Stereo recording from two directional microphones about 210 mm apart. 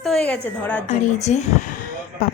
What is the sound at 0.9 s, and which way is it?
Speech, 35° left (ahead or behind).